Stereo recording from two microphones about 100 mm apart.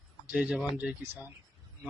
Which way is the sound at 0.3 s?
10° right (ahead or behind).